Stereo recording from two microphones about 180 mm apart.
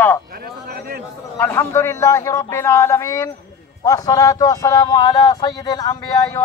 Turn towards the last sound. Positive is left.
turn(degrees=20)  # may be behind; listen again after turning